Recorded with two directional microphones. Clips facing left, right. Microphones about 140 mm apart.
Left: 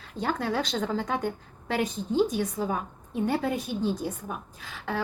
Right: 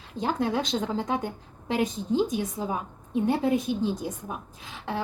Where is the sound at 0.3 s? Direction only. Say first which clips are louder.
Right 2 dB; 20° right (ahead or behind).